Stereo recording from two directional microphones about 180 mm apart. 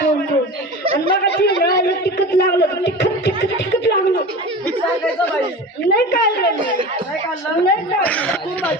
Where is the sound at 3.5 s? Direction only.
65° left (ahead or behind).